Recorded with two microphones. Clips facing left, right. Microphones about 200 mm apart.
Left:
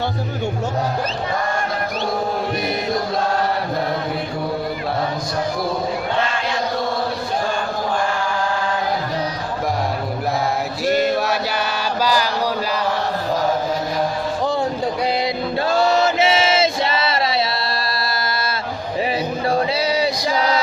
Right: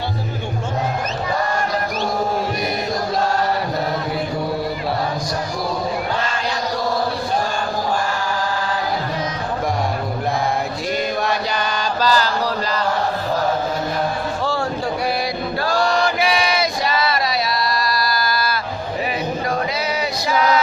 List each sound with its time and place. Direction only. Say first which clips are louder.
10.9 s chant: left 3 dB; 5° left (ahead or behind)
15.6 s chant: left 2 dB; 25° left (ahead or behind)
19.5 s music: left 3 dB; 30° left (ahead or behind)